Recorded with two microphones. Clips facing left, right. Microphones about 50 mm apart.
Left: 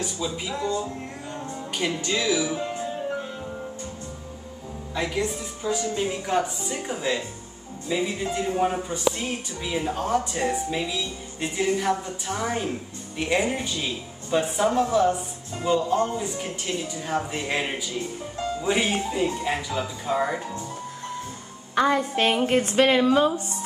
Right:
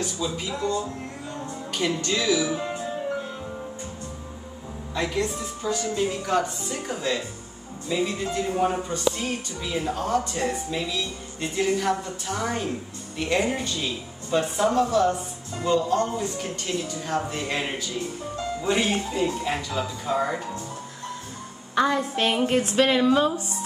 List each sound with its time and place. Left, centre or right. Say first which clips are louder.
0.0 s speech: right 1 dB; centre
4.9 s speech: even; centre
21.7 s speech: left 1 dB; centre